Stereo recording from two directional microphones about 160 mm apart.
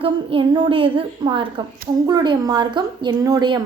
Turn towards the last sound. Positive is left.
turn(degrees=-25)  # may be behind; listen again after turning